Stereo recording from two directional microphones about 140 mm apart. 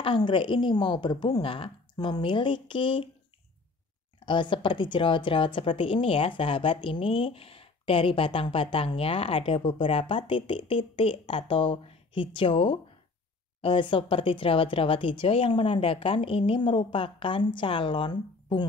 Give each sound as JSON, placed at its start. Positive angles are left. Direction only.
{"t": 0.0, "sound": "a woman's voice", "side_deg": 35}
{"t": 4.3, "sound": "a woman's voice", "side_deg": 35}